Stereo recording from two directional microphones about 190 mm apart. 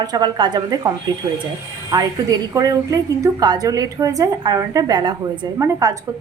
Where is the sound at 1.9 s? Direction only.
20° right (ahead or behind).